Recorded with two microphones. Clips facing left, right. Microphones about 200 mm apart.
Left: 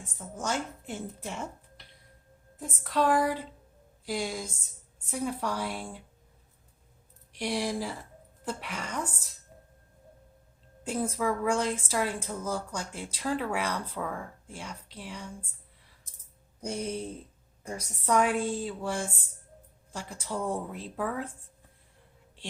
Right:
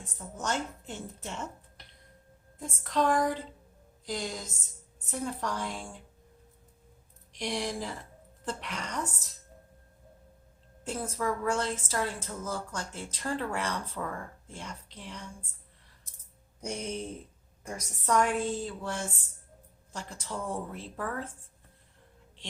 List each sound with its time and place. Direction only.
0.0 s a woman's voice: 10° left (ahead or behind)
2.6 s a woman's voice: 5° left (ahead or behind)
7.3 s a woman's voice: 5° left (ahead or behind)
10.8 s a woman's voice: 15° left (ahead or behind)
16.6 s a woman's voice: 10° left (ahead or behind)